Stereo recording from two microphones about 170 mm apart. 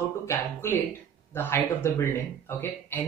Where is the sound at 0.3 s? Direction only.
15° left (ahead or behind).